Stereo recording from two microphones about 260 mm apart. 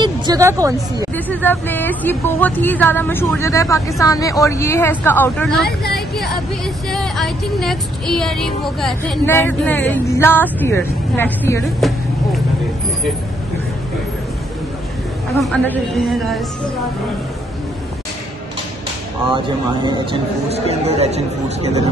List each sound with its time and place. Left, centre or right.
0.0 s speech: centre
1.1 s a sound: centre
15.3 s a woman's voice: centre
19.3 s speech: centre